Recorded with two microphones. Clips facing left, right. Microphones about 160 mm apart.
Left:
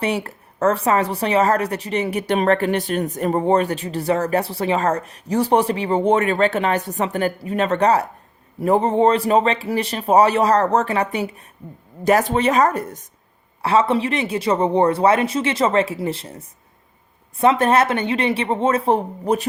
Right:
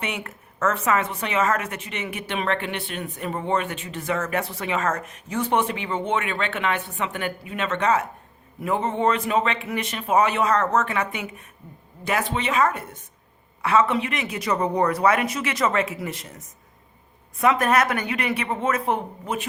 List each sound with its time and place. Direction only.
0.0 s speech: 35° left (ahead or behind)